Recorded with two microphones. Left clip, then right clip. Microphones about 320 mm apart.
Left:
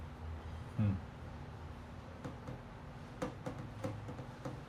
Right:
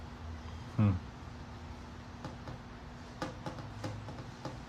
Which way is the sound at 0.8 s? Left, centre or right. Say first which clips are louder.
Right 7 dB; centre.